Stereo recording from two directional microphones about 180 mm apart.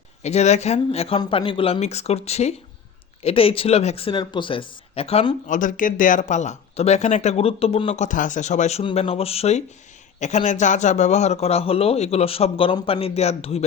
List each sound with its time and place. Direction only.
0.2 s speech: 40° left (ahead or behind)
5.5 s speech: 45° left (ahead or behind)